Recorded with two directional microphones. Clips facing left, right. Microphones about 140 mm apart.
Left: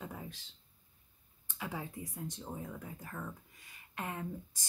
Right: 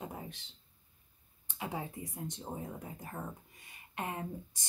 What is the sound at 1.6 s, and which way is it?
Speech, 20° right (ahead or behind).